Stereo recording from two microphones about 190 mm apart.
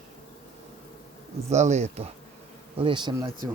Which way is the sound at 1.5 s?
35° right (ahead or behind).